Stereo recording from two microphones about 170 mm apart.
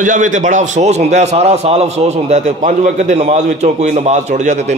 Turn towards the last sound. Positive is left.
turn(degrees=-45)  # may be behind; listen again after turning